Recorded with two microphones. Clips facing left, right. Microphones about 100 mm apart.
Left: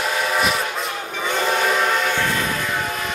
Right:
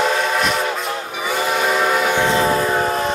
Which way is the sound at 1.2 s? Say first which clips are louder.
Right 1 dB; 10° right (ahead or behind).